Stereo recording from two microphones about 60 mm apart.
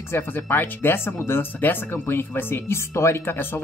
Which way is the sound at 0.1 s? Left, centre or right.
Left.